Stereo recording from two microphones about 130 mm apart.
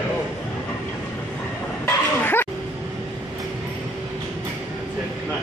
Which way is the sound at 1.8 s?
15° left (ahead or behind).